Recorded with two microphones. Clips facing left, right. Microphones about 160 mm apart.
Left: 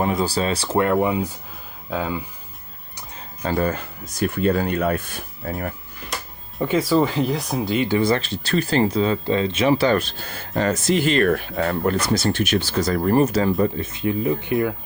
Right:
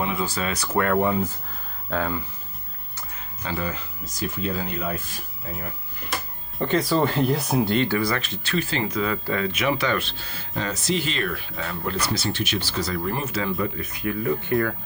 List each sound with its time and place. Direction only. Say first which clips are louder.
0.0 s speech: left 5 dB; 35° left (ahead or behind)
0.9 s speech: left 2 dB; 10° left (ahead or behind)
3.4 s speech: left 7 dB; 50° left (ahead or behind)
6.6 s speech: left 3 dB; 5° left (ahead or behind)
7.8 s speech: left 4 dB; 20° left (ahead or behind); by 13.5 s 40° left (ahead or behind)
13.6 s speech: left 6 dB; 25° left (ahead or behind)